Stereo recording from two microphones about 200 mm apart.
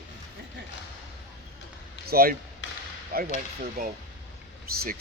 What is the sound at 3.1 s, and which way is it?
Speech, 50° right (ahead or behind).